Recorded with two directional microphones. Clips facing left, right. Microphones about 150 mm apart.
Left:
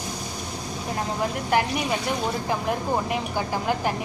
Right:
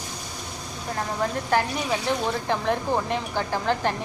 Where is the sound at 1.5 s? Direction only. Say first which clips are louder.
Left 1 dB; 15° left (ahead or behind).